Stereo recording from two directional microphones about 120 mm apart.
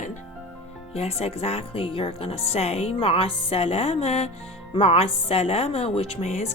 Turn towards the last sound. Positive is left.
turn(degrees=70)  # may be behind; listen again after turning